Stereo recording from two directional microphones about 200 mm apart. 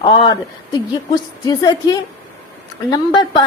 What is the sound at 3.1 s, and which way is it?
Speech, 25° left (ahead or behind).